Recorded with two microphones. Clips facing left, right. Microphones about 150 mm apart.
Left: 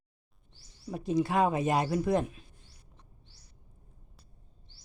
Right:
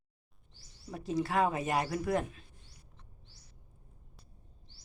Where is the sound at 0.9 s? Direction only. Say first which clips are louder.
Left 4 dB; 20° left (ahead or behind).